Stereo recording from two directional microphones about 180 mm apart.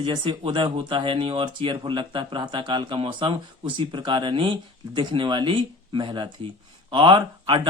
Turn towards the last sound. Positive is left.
turn(degrees=-30)  # may be behind; listen again after turning